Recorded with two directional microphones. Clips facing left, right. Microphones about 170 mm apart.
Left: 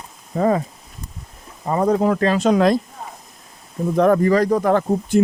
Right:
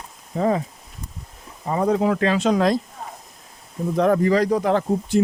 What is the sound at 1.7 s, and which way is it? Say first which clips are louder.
Speech: left 2 dB; 45° left (ahead or behind).